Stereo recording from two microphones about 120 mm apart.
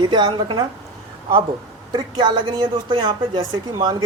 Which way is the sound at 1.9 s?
40° right (ahead or behind).